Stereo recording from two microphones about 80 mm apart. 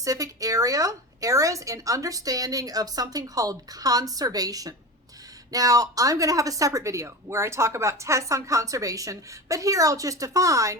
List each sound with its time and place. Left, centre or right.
0.0 s speech: right